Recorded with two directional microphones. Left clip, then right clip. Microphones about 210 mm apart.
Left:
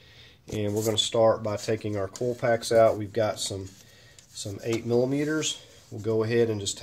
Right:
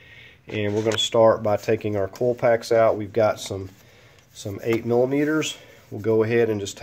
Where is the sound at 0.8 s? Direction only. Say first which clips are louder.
Right 5 dB; 15° right (ahead or behind).